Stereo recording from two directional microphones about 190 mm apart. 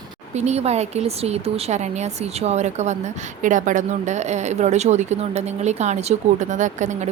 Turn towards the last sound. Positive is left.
turn(degrees=-40)  # may be behind; listen again after turning